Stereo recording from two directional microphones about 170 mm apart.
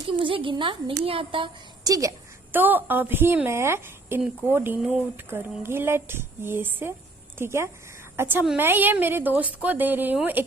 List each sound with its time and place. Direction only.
0.1 s a woman's voice: 30° right (ahead or behind); by 10.4 s 10° right (ahead or behind)